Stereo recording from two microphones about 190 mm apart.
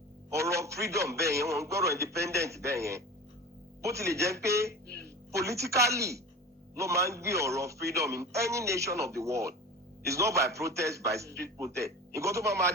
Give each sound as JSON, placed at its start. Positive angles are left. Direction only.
{"t": 0.3, "sound": "a man's voice", "side_deg": -15}